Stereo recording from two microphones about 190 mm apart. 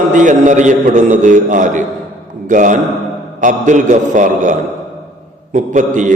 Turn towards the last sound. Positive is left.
turn(degrees=-40)  # may be behind; listen again after turning